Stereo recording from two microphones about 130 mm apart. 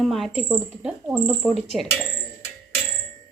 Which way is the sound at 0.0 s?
Centre (ahead or behind).